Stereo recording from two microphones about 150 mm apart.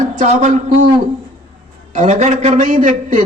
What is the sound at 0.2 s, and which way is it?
Speech, 55° right (ahead or behind).